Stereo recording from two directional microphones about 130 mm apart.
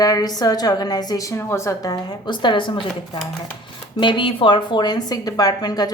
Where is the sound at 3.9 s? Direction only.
40° left (ahead or behind).